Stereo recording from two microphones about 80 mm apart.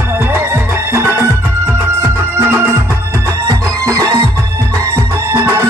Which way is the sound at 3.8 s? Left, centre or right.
Right.